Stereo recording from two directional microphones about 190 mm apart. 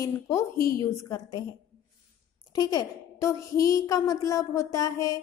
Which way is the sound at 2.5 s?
20° left (ahead or behind).